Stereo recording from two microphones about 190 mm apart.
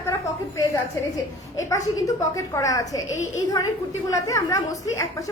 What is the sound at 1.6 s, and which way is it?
A woman's voice, 15° left (ahead or behind).